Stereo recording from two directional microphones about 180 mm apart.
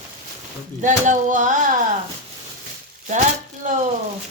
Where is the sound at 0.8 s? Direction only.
45° right (ahead or behind).